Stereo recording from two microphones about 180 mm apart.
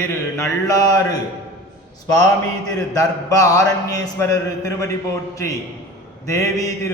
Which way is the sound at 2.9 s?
20° left (ahead or behind).